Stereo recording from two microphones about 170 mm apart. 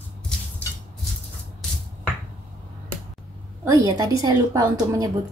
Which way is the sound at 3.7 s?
20° right (ahead or behind).